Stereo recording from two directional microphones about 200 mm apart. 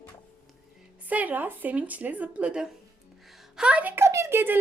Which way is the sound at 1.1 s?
10° right (ahead or behind).